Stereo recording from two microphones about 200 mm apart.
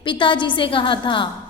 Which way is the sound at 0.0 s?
25° left (ahead or behind).